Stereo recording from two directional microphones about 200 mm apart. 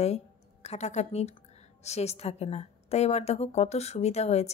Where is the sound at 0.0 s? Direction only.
30° left (ahead or behind).